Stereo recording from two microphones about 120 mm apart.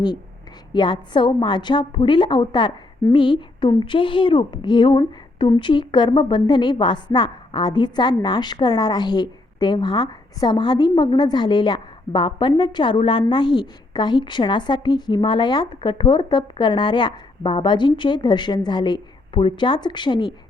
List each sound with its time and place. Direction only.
0.7 s a woman's voice: 40° left (ahead or behind)